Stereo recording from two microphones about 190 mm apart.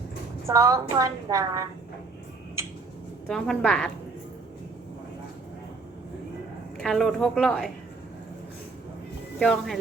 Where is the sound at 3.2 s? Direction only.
5° left (ahead or behind).